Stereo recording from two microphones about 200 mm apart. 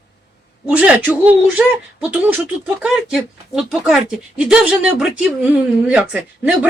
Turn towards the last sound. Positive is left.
turn(degrees=-5)  # may be behind; listen again after turning